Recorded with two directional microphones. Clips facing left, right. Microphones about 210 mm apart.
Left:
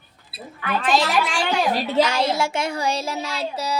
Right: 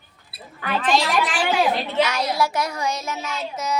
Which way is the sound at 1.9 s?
30° left (ahead or behind).